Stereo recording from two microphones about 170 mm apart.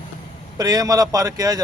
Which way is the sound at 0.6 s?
20° right (ahead or behind).